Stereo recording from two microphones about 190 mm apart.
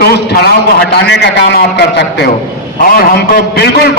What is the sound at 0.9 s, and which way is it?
A man's voice, 60° left (ahead or behind).